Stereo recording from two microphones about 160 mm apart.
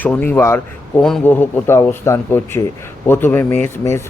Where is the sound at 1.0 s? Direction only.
5° left (ahead or behind).